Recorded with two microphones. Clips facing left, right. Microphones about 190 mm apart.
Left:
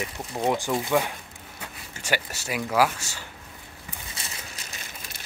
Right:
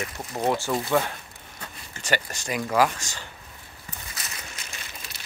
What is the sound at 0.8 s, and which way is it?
Speech, 10° left (ahead or behind).